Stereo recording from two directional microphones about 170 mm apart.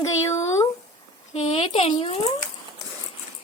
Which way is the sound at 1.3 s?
40° left (ahead or behind).